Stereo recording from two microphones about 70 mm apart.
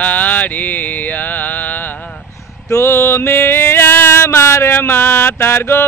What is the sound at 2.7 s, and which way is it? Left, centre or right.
Music, left.